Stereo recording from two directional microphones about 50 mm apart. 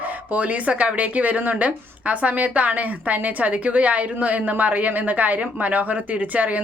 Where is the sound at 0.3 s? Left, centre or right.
Right.